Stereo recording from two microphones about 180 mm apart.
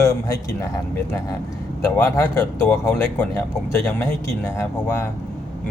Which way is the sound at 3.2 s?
10° left (ahead or behind).